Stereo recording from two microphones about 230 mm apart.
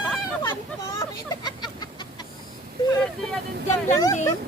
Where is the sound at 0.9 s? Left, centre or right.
Centre.